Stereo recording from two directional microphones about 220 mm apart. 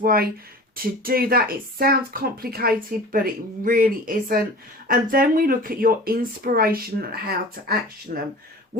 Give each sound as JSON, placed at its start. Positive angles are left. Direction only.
{"t": 0.0, "sound": "speech", "side_deg": -40}